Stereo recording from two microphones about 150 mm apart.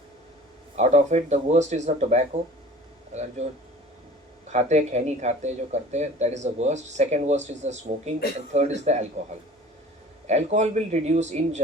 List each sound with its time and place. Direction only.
0.8 s speech: 50° right (ahead or behind)
3.4 s speech: 50° right (ahead or behind)
10.2 s speech: 50° right (ahead or behind)